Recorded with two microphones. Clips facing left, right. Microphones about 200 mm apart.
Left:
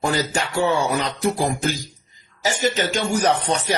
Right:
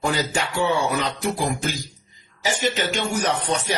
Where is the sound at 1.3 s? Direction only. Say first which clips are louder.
Left 3 dB; 45° left (ahead or behind).